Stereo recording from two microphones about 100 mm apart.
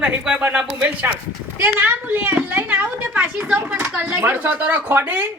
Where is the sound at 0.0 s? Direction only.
10° right (ahead or behind).